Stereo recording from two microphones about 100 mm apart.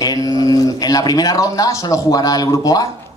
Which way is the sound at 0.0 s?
40° left (ahead or behind).